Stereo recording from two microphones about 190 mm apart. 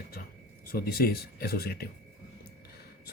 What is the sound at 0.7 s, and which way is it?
Speech, 55° left (ahead or behind).